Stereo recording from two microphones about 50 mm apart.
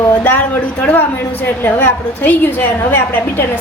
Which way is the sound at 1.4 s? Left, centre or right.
Left.